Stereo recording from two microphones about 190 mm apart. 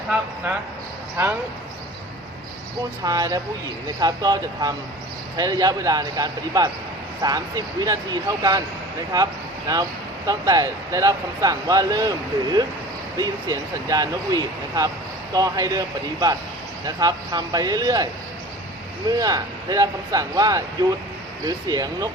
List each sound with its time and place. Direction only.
3.0 s speech: 20° right (ahead or behind)